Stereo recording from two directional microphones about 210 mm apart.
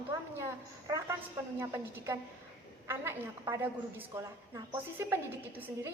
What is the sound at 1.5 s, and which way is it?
A woman's voice, 15° right (ahead or behind).